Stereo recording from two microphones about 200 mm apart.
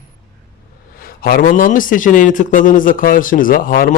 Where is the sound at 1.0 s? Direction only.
45° left (ahead or behind).